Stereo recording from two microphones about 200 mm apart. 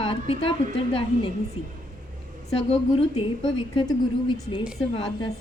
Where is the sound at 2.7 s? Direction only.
30° left (ahead or behind).